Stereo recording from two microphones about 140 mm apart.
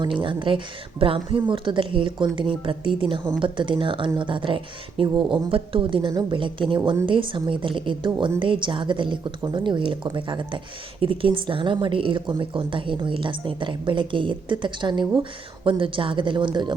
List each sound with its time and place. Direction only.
0.0 s a woman's voice: 35° right (ahead or behind)